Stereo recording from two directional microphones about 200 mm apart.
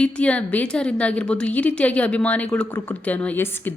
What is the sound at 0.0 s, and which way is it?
A woman's voice, 5° left (ahead or behind).